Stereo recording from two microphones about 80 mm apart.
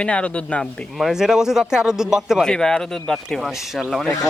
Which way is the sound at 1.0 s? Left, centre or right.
Centre.